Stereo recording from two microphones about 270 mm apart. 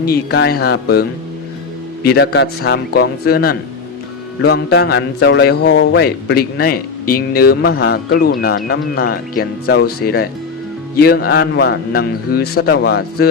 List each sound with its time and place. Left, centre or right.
0.0 s a man's voice: left
2.0 s a man's voice: left